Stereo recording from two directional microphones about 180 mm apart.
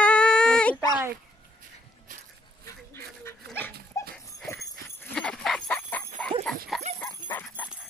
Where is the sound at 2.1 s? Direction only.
45° right (ahead or behind).